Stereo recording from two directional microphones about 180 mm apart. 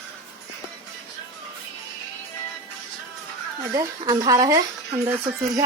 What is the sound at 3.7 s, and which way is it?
Speech, 20° right (ahead or behind).